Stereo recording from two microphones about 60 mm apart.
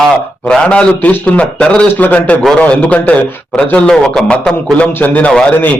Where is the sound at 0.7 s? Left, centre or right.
Left.